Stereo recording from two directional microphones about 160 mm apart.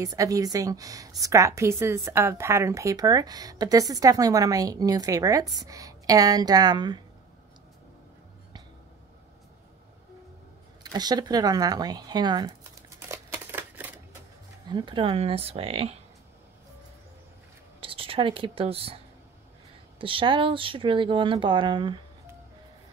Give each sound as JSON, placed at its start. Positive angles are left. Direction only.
{"t": 0.0, "sound": "a woman's voice", "side_deg": -20}
{"t": 10.8, "sound": "a woman's voice", "side_deg": -25}
{"t": 13.1, "sound": "a sound", "side_deg": -10}
{"t": 14.7, "sound": "speech", "side_deg": -30}
{"t": 17.7, "sound": "speech", "side_deg": -35}
{"t": 20.0, "sound": "speech", "side_deg": -35}